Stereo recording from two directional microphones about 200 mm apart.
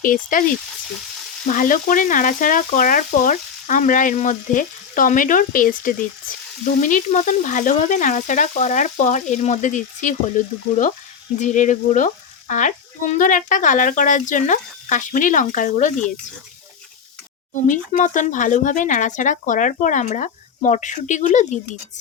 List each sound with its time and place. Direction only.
0.0 s speech: 40° left (ahead or behind)
1.5 s speech: 40° left (ahead or behind)
17.5 s speech: 40° left (ahead or behind)